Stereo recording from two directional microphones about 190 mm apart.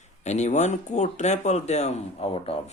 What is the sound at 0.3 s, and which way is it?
Speech, 35° left (ahead or behind).